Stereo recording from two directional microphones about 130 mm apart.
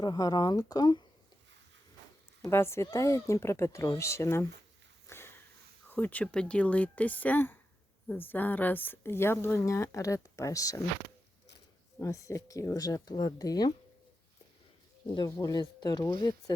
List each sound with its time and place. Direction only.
0.0 s a woman's voice: 30° left (ahead or behind)
2.4 s a woman's voice: 20° left (ahead or behind)
5.0 s sniff: 20° left (ahead or behind)
5.9 s a woman's voice: 10° left (ahead or behind)
11.9 s a woman's voice: 25° left (ahead or behind)
15.1 s speech: 30° left (ahead or behind)